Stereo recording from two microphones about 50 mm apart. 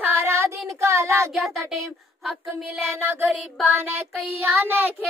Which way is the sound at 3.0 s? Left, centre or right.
Right.